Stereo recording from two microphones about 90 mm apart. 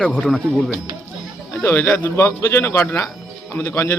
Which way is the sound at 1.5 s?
30° left (ahead or behind).